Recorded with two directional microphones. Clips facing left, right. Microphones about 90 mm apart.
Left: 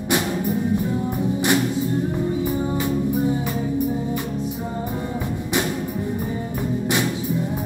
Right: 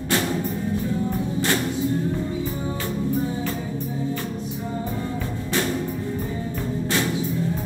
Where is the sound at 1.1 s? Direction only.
15° left (ahead or behind).